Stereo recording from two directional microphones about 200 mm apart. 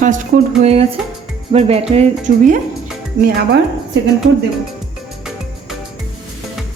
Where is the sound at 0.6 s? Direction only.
30° right (ahead or behind); by 3.6 s 45° right (ahead or behind).